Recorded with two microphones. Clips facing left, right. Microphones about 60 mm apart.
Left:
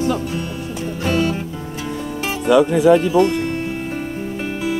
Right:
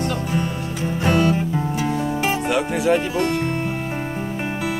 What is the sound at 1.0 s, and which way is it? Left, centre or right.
Music, right.